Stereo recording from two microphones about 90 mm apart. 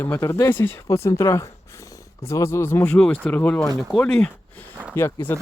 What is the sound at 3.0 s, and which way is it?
Speech, 15° left (ahead or behind).